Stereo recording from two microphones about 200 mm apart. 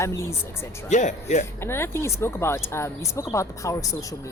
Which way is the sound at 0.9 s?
35° left (ahead or behind).